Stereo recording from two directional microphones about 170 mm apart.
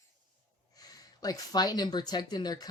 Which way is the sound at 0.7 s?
20° left (ahead or behind).